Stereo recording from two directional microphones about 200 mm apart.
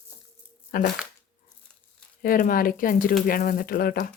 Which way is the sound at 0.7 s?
50° left (ahead or behind).